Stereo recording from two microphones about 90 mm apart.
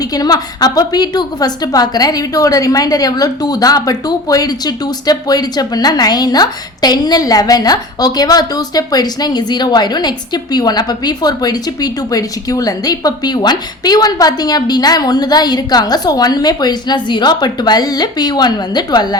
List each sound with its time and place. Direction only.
0.1 s a woman's voice: 45° left (ahead or behind)